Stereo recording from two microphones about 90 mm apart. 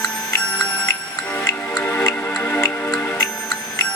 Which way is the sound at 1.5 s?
30° left (ahead or behind).